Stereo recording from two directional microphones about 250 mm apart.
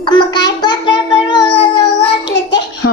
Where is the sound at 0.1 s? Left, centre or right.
Centre.